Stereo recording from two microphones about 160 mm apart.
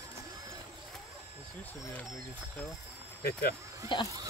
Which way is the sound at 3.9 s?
30° left (ahead or behind).